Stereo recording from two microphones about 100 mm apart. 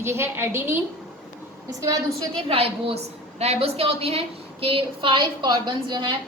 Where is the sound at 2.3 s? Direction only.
70° right (ahead or behind).